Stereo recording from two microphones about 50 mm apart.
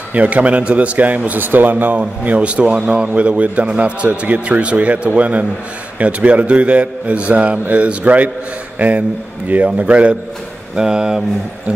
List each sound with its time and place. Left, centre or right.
0.1 s a man's voice: right
10.8 s speech: centre